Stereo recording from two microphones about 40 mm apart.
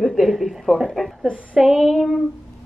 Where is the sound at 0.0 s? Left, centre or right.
Centre.